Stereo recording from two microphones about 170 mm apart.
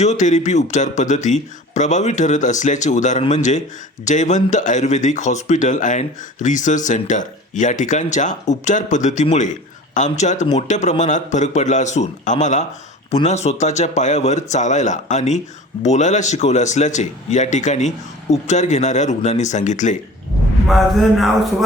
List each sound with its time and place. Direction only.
0.0 s speech: 45° left (ahead or behind)
20.7 s a man's voice: centre (ahead or behind)